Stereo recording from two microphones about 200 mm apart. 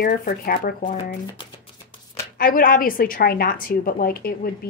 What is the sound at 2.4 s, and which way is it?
A woman's voice, 45° left (ahead or behind).